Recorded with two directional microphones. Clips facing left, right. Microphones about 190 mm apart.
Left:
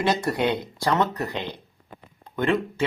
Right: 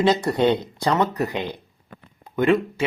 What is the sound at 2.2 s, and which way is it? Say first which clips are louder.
Speech: right 4 dB; 10° right (ahead or behind).